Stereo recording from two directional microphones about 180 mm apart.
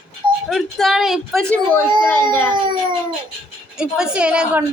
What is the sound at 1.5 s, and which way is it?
Speech, 10° left (ahead or behind).